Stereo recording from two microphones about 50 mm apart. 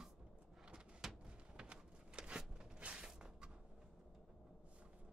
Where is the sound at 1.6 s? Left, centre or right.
Centre.